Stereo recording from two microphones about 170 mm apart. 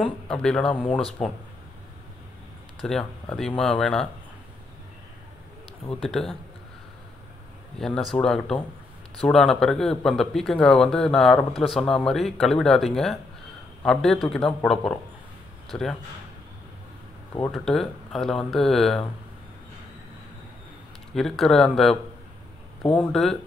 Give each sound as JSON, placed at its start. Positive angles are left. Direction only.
{"t": 0.3, "sound": "speech", "side_deg": 5}
{"t": 2.8, "sound": "speech", "side_deg": 5}
{"t": 5.9, "sound": "speech", "side_deg": 0}
{"t": 7.8, "sound": "speech", "side_deg": 5}
{"t": 17.5, "sound": "speech", "side_deg": 0}
{"t": 21.1, "sound": "speech", "side_deg": 0}